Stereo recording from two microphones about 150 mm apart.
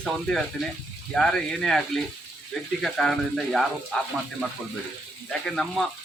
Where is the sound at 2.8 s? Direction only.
Centre (ahead or behind).